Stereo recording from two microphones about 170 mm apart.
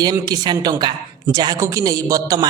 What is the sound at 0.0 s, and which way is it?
A woman's voice, 25° right (ahead or behind).